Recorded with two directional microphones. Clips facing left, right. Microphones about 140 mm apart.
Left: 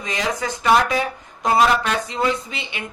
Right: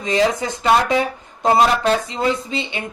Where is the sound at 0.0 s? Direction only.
25° right (ahead or behind).